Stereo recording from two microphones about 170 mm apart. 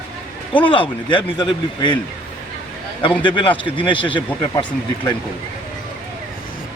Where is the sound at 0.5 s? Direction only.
30° left (ahead or behind).